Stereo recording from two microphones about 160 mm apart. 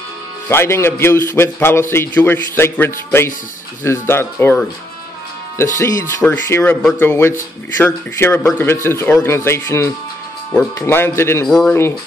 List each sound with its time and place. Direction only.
0.5 s a man's voice: 15° left (ahead or behind)
5.8 s a man's voice: 20° left (ahead or behind)
11.4 s speech: centre (ahead or behind)